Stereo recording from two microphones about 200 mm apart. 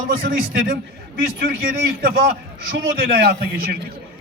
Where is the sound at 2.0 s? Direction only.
50° right (ahead or behind).